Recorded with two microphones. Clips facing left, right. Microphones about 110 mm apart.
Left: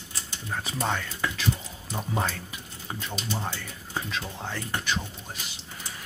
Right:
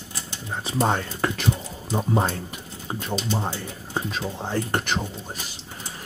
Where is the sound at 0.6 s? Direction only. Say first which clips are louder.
Right 7 dB; 35° right (ahead or behind).